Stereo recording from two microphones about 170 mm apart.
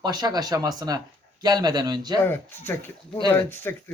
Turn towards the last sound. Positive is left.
turn(degrees=10)  # may be behind; listen again after turning